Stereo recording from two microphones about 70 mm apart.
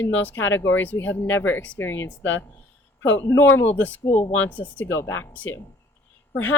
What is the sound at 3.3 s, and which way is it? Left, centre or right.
Speech, left.